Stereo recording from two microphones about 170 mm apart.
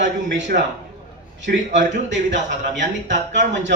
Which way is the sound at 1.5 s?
60° right (ahead or behind).